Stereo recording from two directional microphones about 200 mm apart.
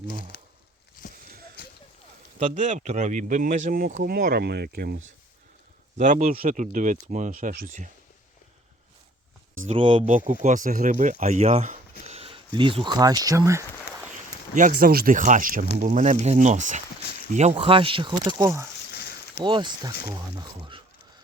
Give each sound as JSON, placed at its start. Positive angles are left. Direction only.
{"t": 1.6, "sound": "a sound", "side_deg": 50}
{"t": 2.4, "sound": "speech", "side_deg": -35}
{"t": 6.0, "sound": "speech", "side_deg": -40}
{"t": 9.6, "sound": "speech", "side_deg": -35}
{"t": 14.5, "sound": "speech", "side_deg": -40}
{"t": 18.9, "sound": "a sound", "side_deg": 55}
{"t": 19.4, "sound": "speech", "side_deg": -25}